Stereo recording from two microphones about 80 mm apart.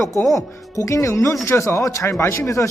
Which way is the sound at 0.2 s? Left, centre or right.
Centre.